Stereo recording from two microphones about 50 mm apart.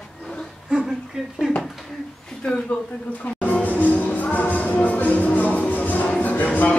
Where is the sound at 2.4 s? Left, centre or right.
Left.